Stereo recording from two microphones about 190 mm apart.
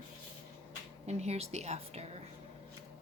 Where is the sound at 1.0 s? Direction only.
35° right (ahead or behind).